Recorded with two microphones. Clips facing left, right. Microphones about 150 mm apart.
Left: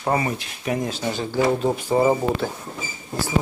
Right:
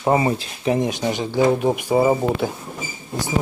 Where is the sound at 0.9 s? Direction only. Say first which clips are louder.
Right 3 dB; 15° right (ahead or behind).